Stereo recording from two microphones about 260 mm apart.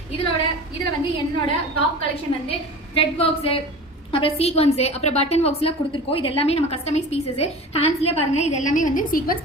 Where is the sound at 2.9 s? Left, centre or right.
Left.